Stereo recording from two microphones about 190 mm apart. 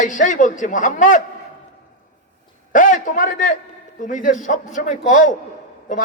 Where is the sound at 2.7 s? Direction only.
40° left (ahead or behind).